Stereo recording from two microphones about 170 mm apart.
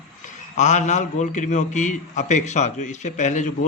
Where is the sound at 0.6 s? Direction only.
45° left (ahead or behind).